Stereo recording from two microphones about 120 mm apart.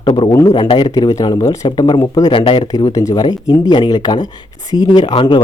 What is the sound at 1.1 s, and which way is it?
Speech, 30° left (ahead or behind).